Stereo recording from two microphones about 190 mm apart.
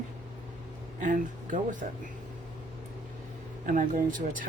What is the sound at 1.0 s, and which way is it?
Speech, 45° right (ahead or behind).